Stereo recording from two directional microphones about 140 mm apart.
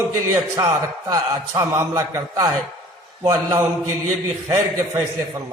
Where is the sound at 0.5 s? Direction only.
25° right (ahead or behind).